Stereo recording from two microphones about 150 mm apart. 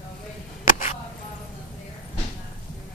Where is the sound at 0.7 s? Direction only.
65° left (ahead or behind).